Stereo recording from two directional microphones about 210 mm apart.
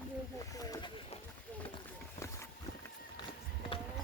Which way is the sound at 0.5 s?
15° left (ahead or behind).